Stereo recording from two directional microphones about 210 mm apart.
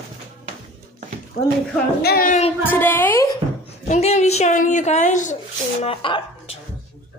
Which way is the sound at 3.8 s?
30° left (ahead or behind).